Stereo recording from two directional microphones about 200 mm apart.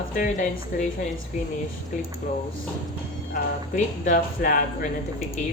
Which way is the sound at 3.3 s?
40° left (ahead or behind).